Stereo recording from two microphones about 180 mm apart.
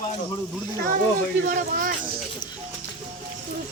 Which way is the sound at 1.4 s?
45° right (ahead or behind).